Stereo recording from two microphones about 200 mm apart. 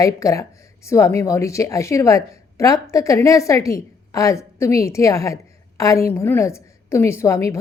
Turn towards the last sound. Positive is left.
turn(degrees=15)  # may be behind; listen again after turning